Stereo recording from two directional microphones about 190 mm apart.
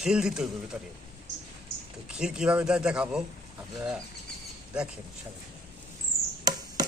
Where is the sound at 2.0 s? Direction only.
5° right (ahead or behind).